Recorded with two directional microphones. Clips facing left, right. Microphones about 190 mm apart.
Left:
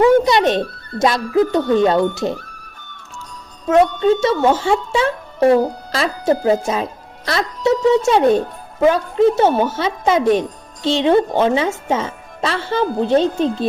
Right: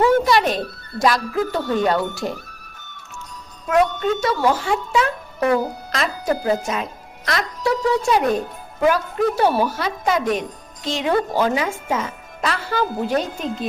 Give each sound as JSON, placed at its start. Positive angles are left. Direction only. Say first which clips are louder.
{"t": 0.0, "sound": "speech", "louder": "left 4 dB", "side_deg": 20}
{"t": 3.7, "sound": "speech", "louder": "left 5 dB", "side_deg": 25}